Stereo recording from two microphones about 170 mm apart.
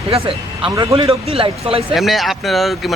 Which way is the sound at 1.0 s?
35° right (ahead or behind).